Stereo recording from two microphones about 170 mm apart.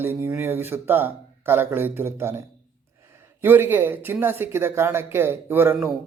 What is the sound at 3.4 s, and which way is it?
Speech, 10° right (ahead or behind).